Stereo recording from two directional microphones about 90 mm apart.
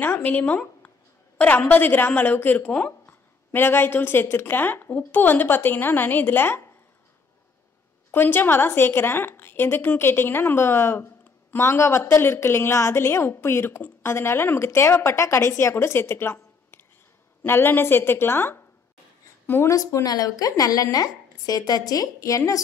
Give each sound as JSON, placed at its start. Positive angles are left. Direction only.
{"t": 0.0, "sound": "a woman's voice", "side_deg": 20}
{"t": 8.1, "sound": "a woman's voice", "side_deg": 20}
{"t": 19.7, "sound": "speech", "side_deg": 40}